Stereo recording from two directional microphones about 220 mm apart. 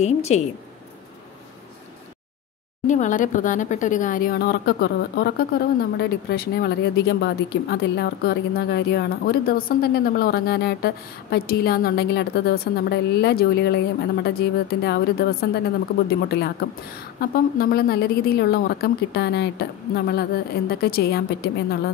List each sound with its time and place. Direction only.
0.0 s a woman's voice: 30° left (ahead or behind)
2.9 s speech: 35° left (ahead or behind)